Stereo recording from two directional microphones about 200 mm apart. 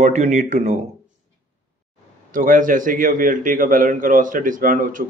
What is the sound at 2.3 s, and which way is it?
Speech, 40° right (ahead or behind).